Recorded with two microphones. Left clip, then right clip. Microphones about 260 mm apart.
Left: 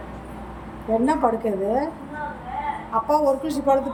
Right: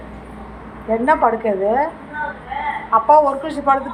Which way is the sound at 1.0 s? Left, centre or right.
Centre.